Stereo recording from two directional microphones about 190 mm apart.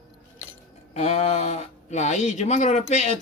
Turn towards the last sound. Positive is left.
turn(degrees=35)  # may be behind; listen again after turning